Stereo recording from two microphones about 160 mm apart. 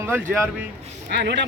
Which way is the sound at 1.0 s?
90° right.